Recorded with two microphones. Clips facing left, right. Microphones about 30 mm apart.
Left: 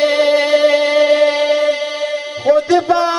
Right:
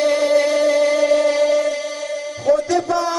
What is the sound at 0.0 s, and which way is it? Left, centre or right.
Music, left.